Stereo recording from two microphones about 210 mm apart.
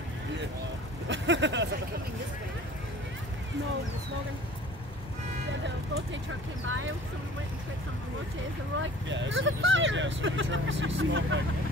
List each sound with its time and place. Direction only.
1.0 s speech: 60° right (ahead or behind)
6.6 s speech: 65° right (ahead or behind)
8.7 s speech: 60° right (ahead or behind)